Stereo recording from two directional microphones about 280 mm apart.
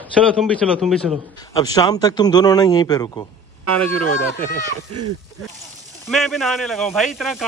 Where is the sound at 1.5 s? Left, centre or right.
Centre.